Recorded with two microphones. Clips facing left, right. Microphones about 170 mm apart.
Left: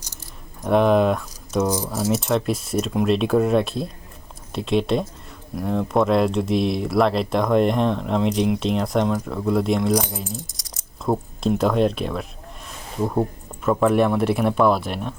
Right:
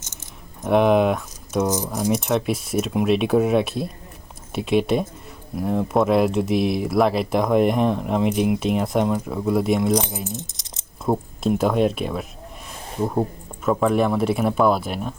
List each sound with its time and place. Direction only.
0.6 s speech: 5° right (ahead or behind)
1.6 s speech: 20° right (ahead or behind)
2.0 s speech: 5° left (ahead or behind)
10.3 s keys jangling: 20° right (ahead or behind)
11.0 s speech: 5° right (ahead or behind)